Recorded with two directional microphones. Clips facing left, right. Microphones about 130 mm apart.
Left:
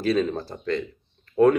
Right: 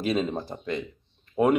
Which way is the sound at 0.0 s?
20° right (ahead or behind).